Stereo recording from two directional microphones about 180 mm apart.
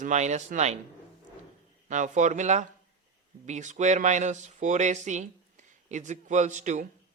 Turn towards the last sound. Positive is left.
turn(degrees=-40)  # may be behind; listen again after turning